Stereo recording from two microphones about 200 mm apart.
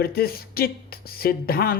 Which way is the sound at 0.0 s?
50° left (ahead or behind).